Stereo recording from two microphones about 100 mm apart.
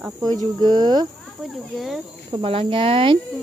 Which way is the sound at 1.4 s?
Centre (ahead or behind).